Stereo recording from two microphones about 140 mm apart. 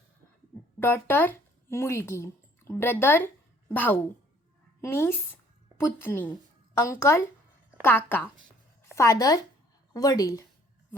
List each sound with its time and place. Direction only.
0.8 s speech: 15° left (ahead or behind)
9.0 s speech: 25° left (ahead or behind)